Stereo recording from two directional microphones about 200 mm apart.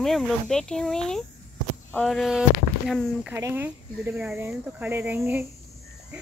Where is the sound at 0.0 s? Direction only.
Centre (ahead or behind).